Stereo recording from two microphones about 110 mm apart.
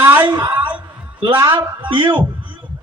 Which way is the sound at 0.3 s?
40° right (ahead or behind).